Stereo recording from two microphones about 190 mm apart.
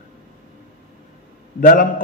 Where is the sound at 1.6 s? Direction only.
45° left (ahead or behind).